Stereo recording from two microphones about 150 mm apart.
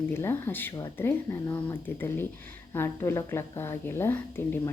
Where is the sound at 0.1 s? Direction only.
15° left (ahead or behind).